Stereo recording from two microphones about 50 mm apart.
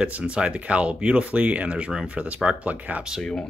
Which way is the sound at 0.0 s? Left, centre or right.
Right.